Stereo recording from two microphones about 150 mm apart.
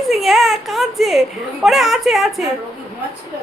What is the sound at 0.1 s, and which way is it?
A woman's voice, centre (ahead or behind).